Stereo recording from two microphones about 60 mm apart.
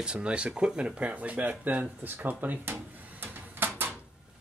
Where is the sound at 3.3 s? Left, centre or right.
Right.